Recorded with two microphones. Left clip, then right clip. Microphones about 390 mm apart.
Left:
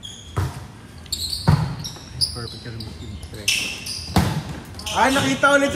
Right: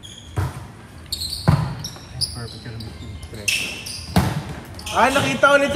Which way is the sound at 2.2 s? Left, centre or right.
Centre.